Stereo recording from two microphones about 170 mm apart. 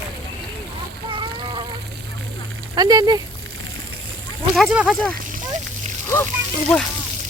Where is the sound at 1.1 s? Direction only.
30° right (ahead or behind).